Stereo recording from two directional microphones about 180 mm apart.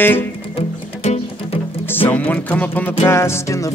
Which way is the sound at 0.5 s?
35° left (ahead or behind).